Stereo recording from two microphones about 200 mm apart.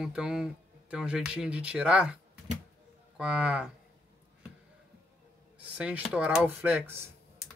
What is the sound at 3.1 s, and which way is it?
Speech, 5° right (ahead or behind).